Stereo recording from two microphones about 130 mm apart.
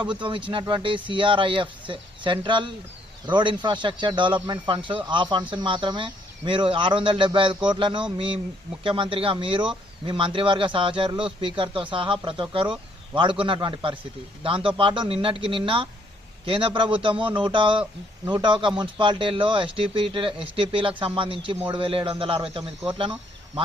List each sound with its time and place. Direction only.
0.0 s speech: 40° right (ahead or behind)